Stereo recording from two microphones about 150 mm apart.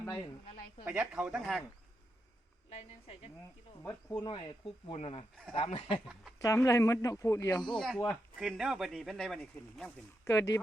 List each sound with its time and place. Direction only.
0.0 s speech: 15° left (ahead or behind)
0.9 s speech: 10° right (ahead or behind)
2.6 s a woman's voice: 45° left (ahead or behind)
4.2 s speech: 30° left (ahead or behind)
6.4 s speech: 20° left (ahead or behind)
7.8 s speech: centre (ahead or behind)
10.2 s speech: 20° left (ahead or behind)